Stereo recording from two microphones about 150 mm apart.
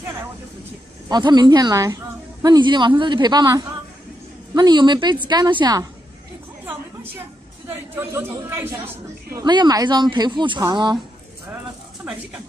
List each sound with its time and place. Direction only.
1.0 s a woman's voice: 30° right (ahead or behind)
7.6 s a woman's voice: 15° right (ahead or behind)
9.4 s a woman's voice: 30° right (ahead or behind)
12.0 s a woman's voice: 10° right (ahead or behind)